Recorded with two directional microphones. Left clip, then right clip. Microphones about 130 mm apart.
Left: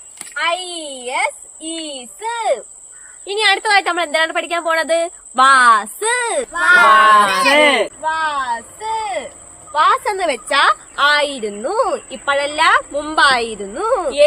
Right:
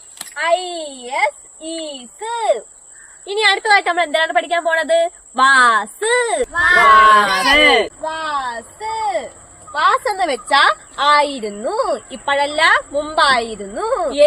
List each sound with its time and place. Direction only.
0.3 s a child's voice: 15° left (ahead or behind)
3.2 s speech: 15° left (ahead or behind)